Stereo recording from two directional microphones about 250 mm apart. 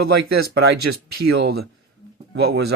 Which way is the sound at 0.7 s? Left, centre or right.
Right.